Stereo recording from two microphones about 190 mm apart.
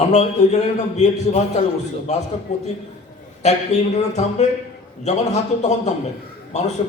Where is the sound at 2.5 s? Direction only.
35° left (ahead or behind).